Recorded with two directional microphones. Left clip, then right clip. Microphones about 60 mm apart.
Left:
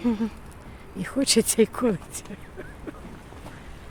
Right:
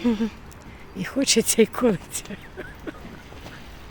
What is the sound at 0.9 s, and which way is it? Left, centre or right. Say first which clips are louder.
Speech: right 1 dB; centre.